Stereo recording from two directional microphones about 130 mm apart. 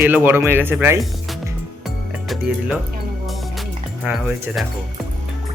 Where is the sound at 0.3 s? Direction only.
15° right (ahead or behind).